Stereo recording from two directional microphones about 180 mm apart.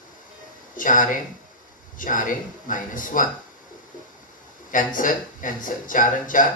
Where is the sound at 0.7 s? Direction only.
45° left (ahead or behind).